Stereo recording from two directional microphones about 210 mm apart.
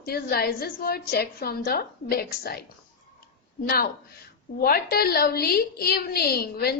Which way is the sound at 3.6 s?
45° left (ahead or behind).